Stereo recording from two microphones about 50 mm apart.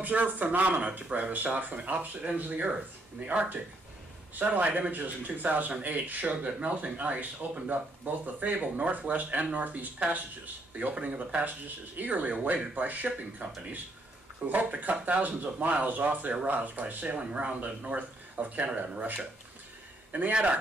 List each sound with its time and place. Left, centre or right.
0.0 s speech: right
14.5 s speech: right
20.1 s a man's voice: right